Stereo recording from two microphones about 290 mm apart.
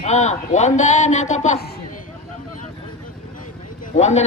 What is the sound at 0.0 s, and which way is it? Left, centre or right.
A man's voice, left.